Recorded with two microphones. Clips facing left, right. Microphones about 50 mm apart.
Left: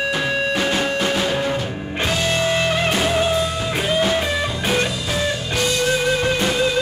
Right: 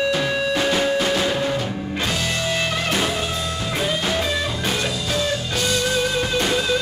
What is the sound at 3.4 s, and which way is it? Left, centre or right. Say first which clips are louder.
Music: left 2 dB; centre.